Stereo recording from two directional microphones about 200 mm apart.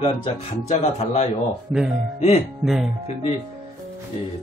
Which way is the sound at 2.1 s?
30° left (ahead or behind).